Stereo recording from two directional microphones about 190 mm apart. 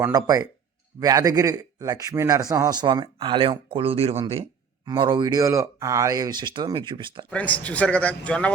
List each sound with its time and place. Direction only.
0.0 s speech: 20° right (ahead or behind)
7.3 s speech: 5° left (ahead or behind)